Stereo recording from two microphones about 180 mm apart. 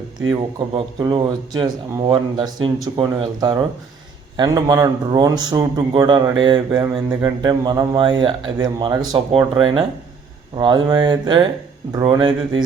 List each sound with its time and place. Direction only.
0.7 s a man's voice: 25° right (ahead or behind)